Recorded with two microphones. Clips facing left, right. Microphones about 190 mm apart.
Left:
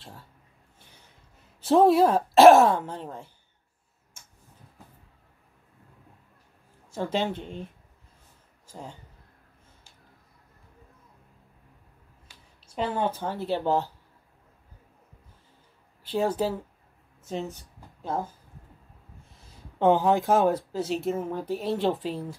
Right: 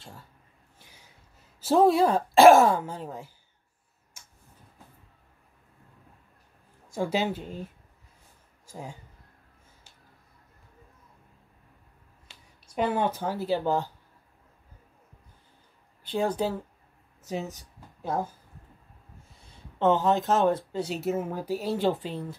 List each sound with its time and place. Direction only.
0.0 s speech: centre (ahead or behind)
1.6 s speech: centre (ahead or behind)
6.9 s speech: 10° right (ahead or behind)
12.3 s a sound: 25° right (ahead or behind)
12.7 s speech: 10° right (ahead or behind)
16.1 s speech: 5° left (ahead or behind)
19.3 s a sound: 5° left (ahead or behind)
19.8 s speech: 15° left (ahead or behind)